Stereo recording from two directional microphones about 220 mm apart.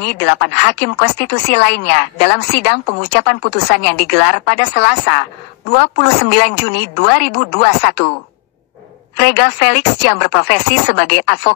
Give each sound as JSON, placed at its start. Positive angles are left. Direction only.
{"t": 0.0, "sound": "speech", "side_deg": 50}
{"t": 9.1, "sound": "speech", "side_deg": 50}